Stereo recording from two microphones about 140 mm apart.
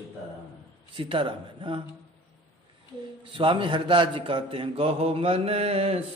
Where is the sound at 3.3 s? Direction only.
35° right (ahead or behind).